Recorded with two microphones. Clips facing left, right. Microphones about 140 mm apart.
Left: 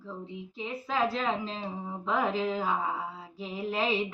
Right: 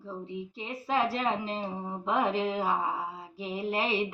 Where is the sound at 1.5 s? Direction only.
15° right (ahead or behind).